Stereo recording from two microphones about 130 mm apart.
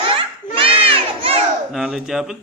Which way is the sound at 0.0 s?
45° right (ahead or behind).